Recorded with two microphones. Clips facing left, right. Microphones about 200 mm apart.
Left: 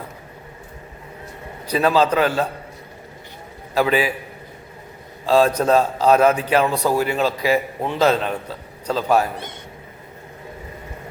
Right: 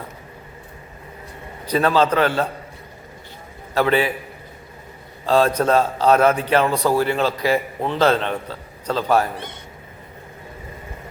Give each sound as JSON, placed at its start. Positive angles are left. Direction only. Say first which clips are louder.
{"t": 1.6, "sound": "a man's voice", "louder": "even", "side_deg": 10}
{"t": 3.8, "sound": "a man's voice", "louder": "even", "side_deg": 10}
{"t": 5.2, "sound": "a man's voice", "louder": "left 1 dB", "side_deg": 10}